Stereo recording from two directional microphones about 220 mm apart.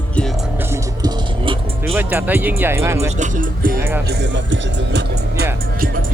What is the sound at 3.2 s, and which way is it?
Speech, 40° right (ahead or behind).